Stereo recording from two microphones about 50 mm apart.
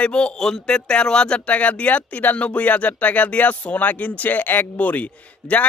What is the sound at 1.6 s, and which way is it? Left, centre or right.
Speech, left.